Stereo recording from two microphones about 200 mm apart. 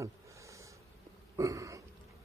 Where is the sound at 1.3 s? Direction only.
15° right (ahead or behind).